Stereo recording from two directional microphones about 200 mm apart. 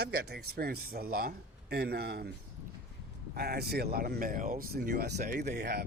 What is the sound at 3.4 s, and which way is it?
Speech, 50° right (ahead or behind).